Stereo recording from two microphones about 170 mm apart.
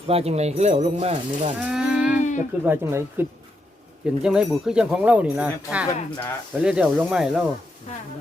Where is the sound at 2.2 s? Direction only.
45° left (ahead or behind).